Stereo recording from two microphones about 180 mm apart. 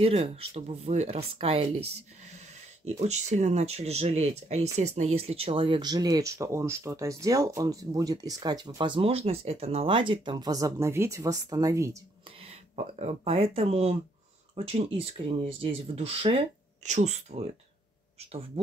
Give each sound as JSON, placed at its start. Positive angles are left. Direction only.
{"t": 0.0, "sound": "speech", "side_deg": -35}
{"t": 3.0, "sound": "speech", "side_deg": -40}
{"t": 12.4, "sound": "speech", "side_deg": -35}